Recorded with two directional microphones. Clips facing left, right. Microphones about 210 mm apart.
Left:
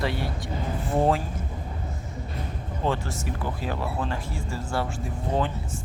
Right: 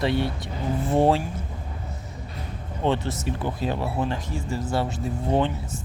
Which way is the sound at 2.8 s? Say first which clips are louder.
Right 4 dB; 20° right (ahead or behind).